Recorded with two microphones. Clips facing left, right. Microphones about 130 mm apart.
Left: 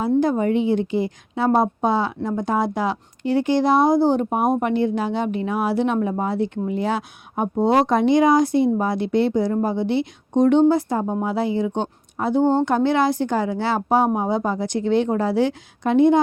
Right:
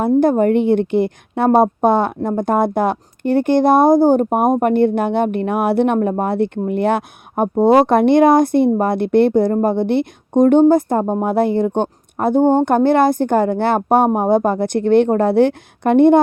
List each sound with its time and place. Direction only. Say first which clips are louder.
0.2 s a woman's voice: right 5 dB; 55° right (ahead or behind)